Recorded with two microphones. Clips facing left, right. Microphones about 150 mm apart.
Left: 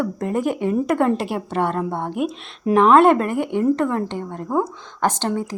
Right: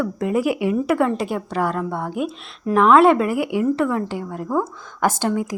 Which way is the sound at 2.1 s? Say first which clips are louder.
Left 1 dB; centre (ahead or behind).